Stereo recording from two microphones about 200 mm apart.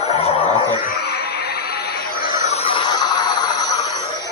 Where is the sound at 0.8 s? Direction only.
50° left (ahead or behind).